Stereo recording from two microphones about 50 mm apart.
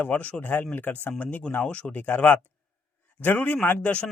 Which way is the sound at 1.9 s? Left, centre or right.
Left.